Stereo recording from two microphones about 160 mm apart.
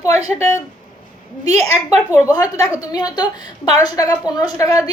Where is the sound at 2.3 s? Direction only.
20° left (ahead or behind).